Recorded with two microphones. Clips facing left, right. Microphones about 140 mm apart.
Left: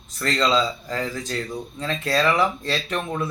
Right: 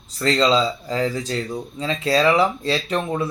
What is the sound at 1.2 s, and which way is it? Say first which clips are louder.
A man's voice: right 3 dB; 10° right (ahead or behind).